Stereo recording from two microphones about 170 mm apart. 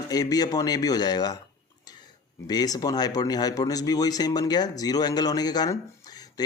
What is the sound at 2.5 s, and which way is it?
Speech, 25° left (ahead or behind).